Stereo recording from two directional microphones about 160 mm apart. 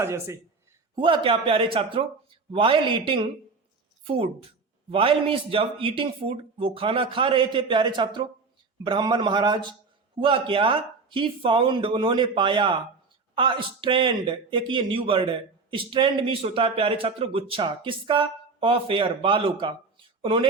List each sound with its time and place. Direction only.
0.0 s speech: 15° right (ahead or behind)
0.9 s a man's voice: 30° right (ahead or behind)